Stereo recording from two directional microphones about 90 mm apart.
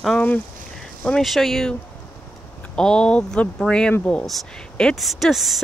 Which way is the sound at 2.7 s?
10° left (ahead or behind).